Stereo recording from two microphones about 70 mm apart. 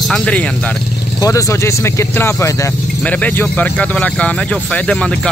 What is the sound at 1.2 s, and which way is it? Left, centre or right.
Speech, left.